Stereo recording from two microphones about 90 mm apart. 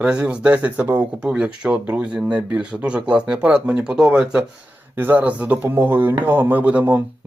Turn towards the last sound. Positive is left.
turn(degrees=-20)  # may be behind; listen again after turning